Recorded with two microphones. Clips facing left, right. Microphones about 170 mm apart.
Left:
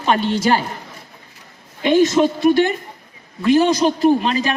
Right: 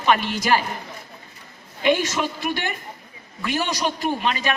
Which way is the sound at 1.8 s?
30° left (ahead or behind).